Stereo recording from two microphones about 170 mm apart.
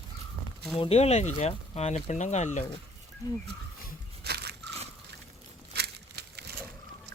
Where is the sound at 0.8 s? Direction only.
35° left (ahead or behind).